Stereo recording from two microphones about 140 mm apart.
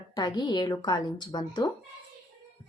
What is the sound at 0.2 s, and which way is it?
Speech, 30° left (ahead or behind).